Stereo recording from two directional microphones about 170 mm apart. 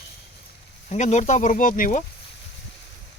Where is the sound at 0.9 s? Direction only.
45° left (ahead or behind).